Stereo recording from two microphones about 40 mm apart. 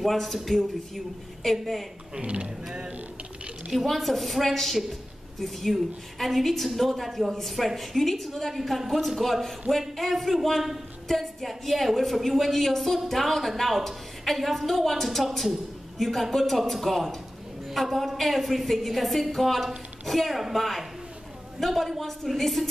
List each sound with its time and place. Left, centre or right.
0.0 s a woman's voice: centre
2.2 s speech: right
3.8 s a woman's voice: centre